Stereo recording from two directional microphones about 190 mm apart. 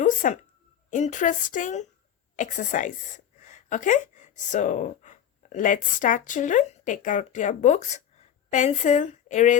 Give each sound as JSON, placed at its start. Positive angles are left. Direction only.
{"t": 0.0, "sound": "a woman's voice", "side_deg": 40}